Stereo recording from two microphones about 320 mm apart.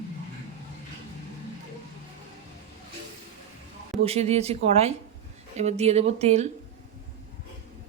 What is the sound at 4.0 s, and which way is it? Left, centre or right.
Speech, centre.